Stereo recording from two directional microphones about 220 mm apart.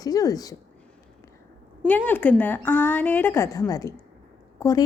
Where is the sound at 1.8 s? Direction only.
10° left (ahead or behind).